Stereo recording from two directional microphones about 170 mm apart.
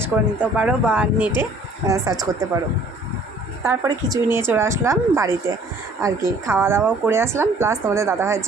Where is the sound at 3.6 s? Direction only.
20° right (ahead or behind).